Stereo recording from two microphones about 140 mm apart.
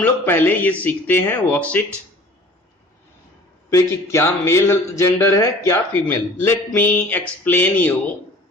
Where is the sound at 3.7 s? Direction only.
15° left (ahead or behind).